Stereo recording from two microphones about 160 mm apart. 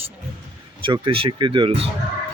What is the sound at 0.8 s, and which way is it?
Speech, 35° right (ahead or behind).